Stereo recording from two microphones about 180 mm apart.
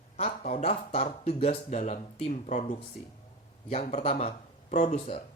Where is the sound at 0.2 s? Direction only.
35° left (ahead or behind).